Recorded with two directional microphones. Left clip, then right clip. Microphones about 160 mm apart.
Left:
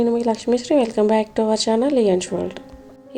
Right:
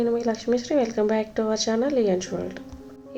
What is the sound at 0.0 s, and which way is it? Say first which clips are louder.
A woman's voice: left 4 dB; 40° left (ahead or behind).